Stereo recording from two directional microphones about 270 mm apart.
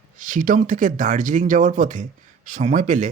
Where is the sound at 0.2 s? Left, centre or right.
Right.